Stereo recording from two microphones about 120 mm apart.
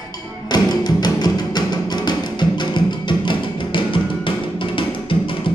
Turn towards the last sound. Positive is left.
turn(degrees=45)  # may be behind; listen again after turning